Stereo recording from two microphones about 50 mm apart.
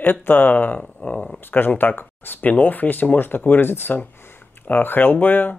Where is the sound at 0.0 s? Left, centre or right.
Left.